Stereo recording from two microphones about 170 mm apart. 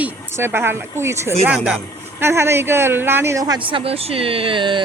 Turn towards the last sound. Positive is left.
turn(degrees=-30)  # may be behind; listen again after turning